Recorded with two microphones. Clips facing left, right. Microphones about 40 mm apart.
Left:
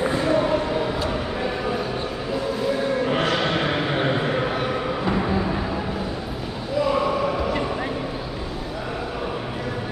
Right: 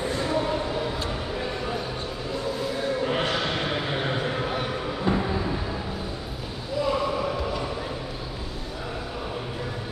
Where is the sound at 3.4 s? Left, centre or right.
Left.